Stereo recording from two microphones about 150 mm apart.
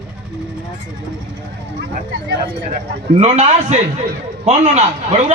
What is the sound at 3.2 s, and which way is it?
A man's voice, 45° right (ahead or behind).